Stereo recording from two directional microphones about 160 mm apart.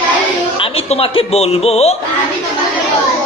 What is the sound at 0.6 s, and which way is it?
Speech, 35° left (ahead or behind).